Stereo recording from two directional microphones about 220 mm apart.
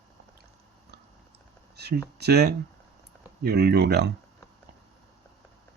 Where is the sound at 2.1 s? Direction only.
50° right (ahead or behind).